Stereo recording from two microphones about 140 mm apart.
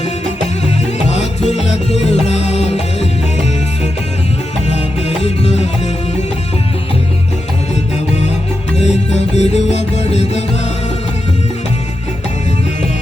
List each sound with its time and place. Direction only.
1.0 s music: 55° left (ahead or behind)
5.2 s music: 50° left (ahead or behind)
8.8 s music: 50° left (ahead or behind)